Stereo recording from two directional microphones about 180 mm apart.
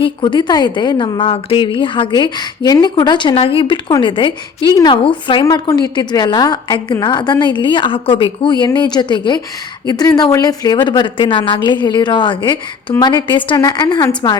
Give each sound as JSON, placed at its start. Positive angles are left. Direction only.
{"t": 0.0, "sound": "a woman's voice", "side_deg": 25}